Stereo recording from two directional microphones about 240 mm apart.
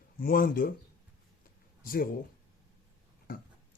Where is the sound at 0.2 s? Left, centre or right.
Left.